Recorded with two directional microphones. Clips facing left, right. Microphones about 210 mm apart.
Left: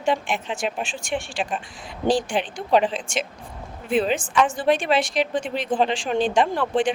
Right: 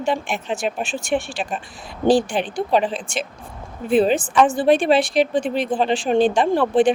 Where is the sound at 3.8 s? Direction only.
35° right (ahead or behind).